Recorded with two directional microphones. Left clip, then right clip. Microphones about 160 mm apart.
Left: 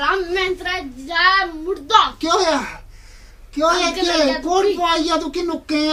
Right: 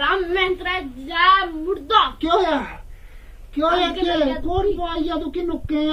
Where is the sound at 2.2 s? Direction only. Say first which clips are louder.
Left 1 dB; 30° left (ahead or behind).